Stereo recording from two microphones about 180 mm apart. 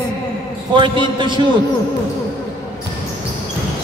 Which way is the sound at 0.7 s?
25° right (ahead or behind).